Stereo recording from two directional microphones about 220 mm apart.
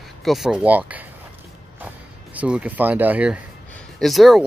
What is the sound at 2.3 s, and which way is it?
Speech, 5° right (ahead or behind).